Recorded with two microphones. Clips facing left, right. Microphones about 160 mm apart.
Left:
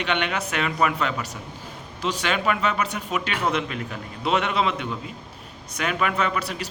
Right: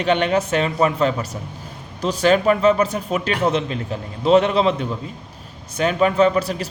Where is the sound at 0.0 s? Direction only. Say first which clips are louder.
Right 8 dB; 35° right (ahead or behind).